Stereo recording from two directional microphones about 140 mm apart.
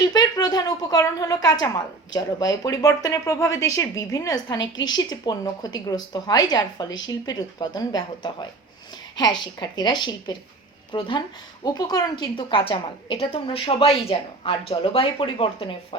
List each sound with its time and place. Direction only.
0.0 s a woman's voice: 30° left (ahead or behind)